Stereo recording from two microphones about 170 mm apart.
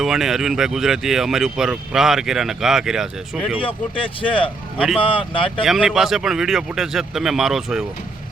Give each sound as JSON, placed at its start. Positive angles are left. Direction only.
{"t": 0.0, "sound": "speech", "side_deg": 0}
{"t": 3.6, "sound": "speech", "side_deg": 30}
{"t": 5.6, "sound": "speech", "side_deg": -5}